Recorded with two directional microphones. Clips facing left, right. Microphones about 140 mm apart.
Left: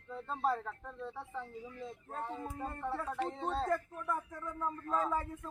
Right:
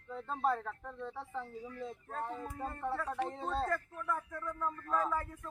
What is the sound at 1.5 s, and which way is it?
Speech, 20° left (ahead or behind).